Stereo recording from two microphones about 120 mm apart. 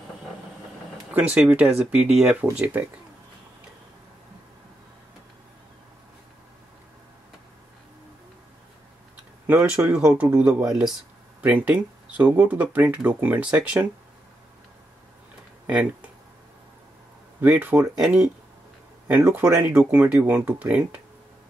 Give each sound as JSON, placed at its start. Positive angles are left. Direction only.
{"t": 1.1, "sound": "speech", "side_deg": -10}
{"t": 9.5, "sound": "speech", "side_deg": -15}
{"t": 10.6, "sound": "speech", "side_deg": -5}
{"t": 15.6, "sound": "speech", "side_deg": -10}
{"t": 17.4, "sound": "speech", "side_deg": -15}